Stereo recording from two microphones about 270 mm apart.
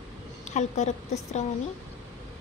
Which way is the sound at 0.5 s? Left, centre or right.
Left.